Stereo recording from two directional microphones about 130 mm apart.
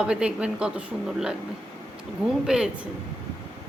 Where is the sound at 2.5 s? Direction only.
5° right (ahead or behind).